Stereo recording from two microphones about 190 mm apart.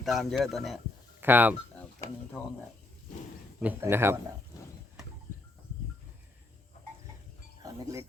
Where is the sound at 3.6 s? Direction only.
10° right (ahead or behind).